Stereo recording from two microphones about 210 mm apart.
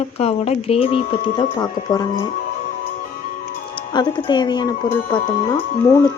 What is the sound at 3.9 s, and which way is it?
Speech, 20° left (ahead or behind).